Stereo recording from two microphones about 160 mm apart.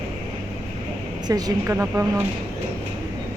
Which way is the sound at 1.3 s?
25° right (ahead or behind).